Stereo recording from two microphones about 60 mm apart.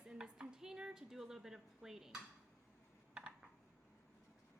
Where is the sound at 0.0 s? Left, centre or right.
Centre.